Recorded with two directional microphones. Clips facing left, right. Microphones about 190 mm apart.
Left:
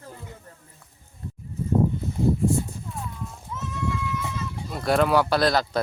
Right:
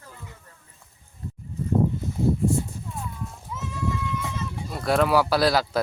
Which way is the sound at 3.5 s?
10° right (ahead or behind).